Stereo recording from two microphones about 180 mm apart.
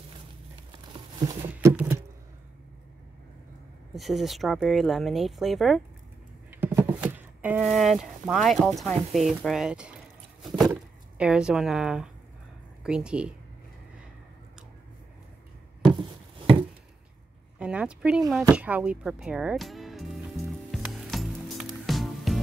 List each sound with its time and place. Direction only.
0.7 s a sound: 25° right (ahead or behind)
1.5 s a sound: 10° right (ahead or behind)
3.9 s speech: centre (ahead or behind)
6.5 s speech: 10° right (ahead or behind)
16.3 s chopping: 30° right (ahead or behind)
17.6 s speech: 5° right (ahead or behind)
18.5 s music: 5° right (ahead or behind)